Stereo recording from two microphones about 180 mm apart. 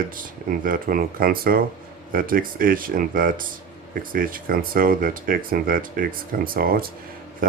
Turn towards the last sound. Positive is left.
turn(degrees=-50)  # may be behind; listen again after turning